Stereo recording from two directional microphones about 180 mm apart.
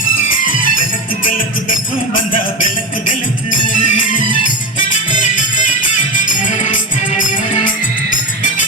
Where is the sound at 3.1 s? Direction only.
45° left (ahead or behind).